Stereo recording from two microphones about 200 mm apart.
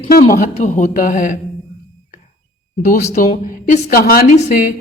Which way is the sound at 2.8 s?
40° left (ahead or behind).